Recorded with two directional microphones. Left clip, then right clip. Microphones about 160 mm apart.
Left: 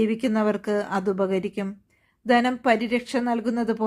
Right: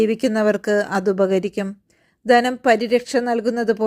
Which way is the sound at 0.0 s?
30° right (ahead or behind).